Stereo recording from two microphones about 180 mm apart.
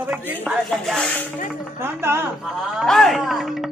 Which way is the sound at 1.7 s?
15° right (ahead or behind).